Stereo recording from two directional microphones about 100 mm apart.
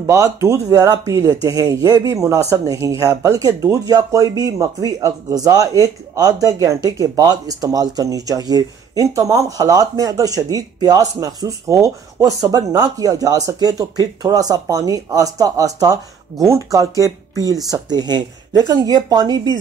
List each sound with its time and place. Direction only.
0.0 s speech: 35° right (ahead or behind)